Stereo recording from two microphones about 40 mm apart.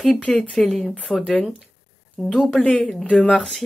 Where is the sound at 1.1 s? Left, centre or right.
Left.